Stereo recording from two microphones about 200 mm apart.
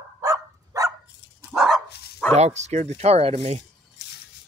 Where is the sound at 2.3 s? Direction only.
35° right (ahead or behind).